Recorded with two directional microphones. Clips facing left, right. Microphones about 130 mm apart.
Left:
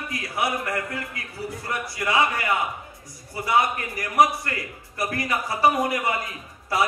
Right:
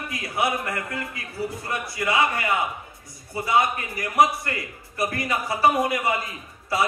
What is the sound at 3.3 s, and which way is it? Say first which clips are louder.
A man's voice: even; 20° right (ahead or behind).